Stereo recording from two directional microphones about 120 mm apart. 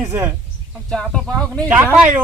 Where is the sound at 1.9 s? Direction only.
10° right (ahead or behind).